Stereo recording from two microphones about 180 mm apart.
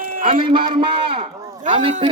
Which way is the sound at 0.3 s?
30° right (ahead or behind).